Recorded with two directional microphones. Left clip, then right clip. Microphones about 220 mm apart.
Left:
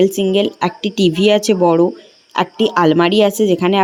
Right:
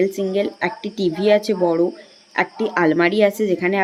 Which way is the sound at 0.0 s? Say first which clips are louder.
Left 6 dB; 25° left (ahead or behind).